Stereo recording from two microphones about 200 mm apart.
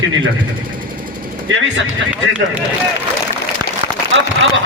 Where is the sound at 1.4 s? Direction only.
70° right (ahead or behind).